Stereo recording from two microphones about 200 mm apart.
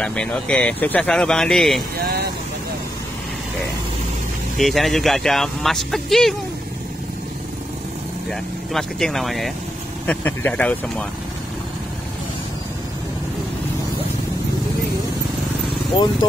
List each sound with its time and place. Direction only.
0.0 s speech: 5° left (ahead or behind)
2.0 s speech: 50° right (ahead or behind)
4.6 s speech: centre (ahead or behind)
8.3 s speech: centre (ahead or behind)